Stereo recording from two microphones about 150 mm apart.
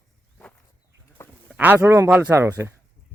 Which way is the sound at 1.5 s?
15° right (ahead or behind).